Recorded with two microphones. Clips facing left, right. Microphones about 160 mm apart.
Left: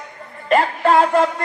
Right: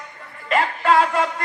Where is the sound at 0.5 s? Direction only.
35° left (ahead or behind).